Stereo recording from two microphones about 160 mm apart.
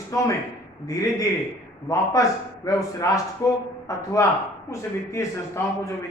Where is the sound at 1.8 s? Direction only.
20° left (ahead or behind).